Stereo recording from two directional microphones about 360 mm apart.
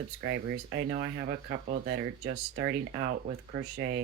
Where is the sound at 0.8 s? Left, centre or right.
Right.